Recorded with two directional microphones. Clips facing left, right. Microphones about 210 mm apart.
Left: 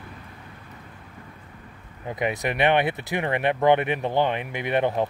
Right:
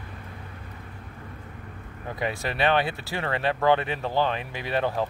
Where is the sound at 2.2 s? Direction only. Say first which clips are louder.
Left 3 dB; 20° left (ahead or behind).